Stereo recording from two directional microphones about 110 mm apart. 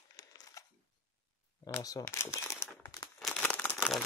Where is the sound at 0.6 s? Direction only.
30° left (ahead or behind).